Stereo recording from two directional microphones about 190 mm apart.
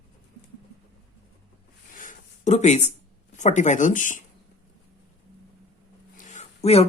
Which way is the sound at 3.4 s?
40° left (ahead or behind).